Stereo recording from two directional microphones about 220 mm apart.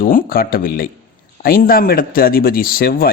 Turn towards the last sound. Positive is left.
turn(degrees=40)  # may be behind; listen again after turning